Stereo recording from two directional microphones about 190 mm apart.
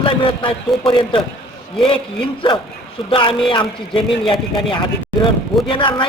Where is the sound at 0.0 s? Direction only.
25° left (ahead or behind).